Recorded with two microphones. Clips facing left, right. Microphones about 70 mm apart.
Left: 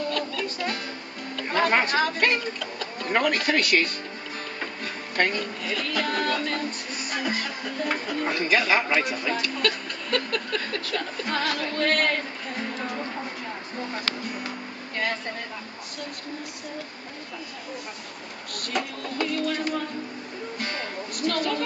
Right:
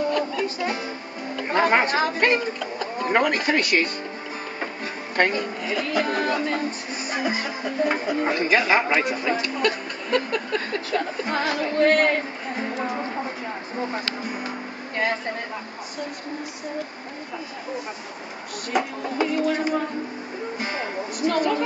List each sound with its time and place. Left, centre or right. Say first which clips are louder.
0.0 s music: right 5 dB; centre
1.3 s speech: right 3 dB; centre
5.1 s speech: right 3 dB; centre
18.7 s speech: right 5 dB; centre
20.5 s music: right 3 dB; centre